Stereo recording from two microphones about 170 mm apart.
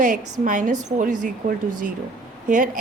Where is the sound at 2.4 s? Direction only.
50° right (ahead or behind).